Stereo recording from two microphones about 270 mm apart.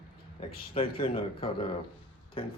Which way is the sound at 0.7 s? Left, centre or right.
Centre.